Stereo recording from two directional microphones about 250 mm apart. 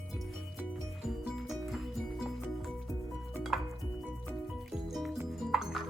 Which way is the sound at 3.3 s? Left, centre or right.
Centre.